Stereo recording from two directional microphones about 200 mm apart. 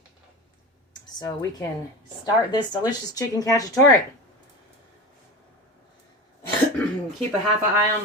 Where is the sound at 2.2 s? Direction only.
20° left (ahead or behind).